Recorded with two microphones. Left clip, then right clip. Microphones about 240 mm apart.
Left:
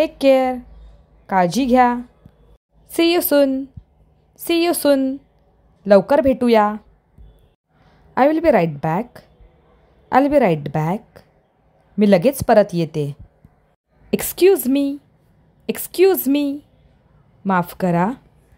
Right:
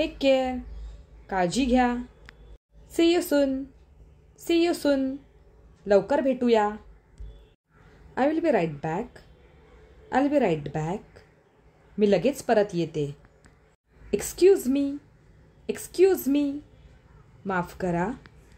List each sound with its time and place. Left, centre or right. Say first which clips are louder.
0.0 s a woman's voice: left 8 dB; left
8.1 s a woman's voice: left 9 dB; left